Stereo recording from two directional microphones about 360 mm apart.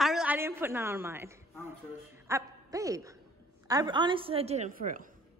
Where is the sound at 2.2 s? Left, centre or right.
Centre.